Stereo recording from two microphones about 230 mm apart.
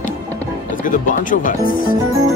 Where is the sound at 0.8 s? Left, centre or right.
Left.